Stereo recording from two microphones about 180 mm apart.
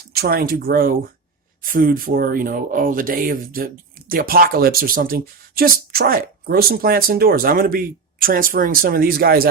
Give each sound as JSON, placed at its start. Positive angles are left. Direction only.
{"t": 0.1, "sound": "speech", "side_deg": -60}